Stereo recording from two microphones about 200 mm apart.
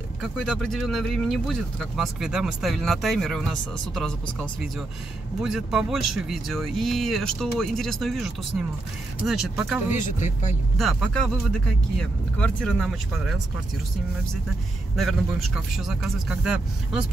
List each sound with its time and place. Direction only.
0.2 s speech: 5° left (ahead or behind)
5.4 s speech: 5° right (ahead or behind)
9.9 s speech: 40° left (ahead or behind)
10.8 s speech: centre (ahead or behind)
15.0 s speech: centre (ahead or behind)